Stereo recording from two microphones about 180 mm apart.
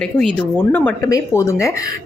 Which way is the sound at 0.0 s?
5° left (ahead or behind).